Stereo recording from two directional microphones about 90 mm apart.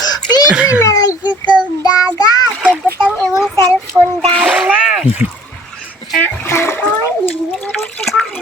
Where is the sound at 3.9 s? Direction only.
45° right (ahead or behind).